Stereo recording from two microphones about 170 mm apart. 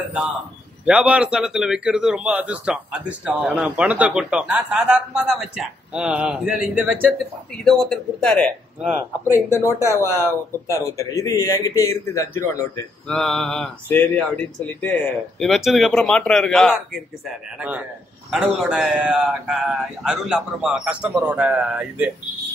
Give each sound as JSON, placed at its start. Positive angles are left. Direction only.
{"t": 0.8, "sound": "a man's voice", "side_deg": -5}
{"t": 7.1, "sound": "a man's voice", "side_deg": 5}
{"t": 9.2, "sound": "a man's voice", "side_deg": 15}
{"t": 13.0, "sound": "a man's voice", "side_deg": 5}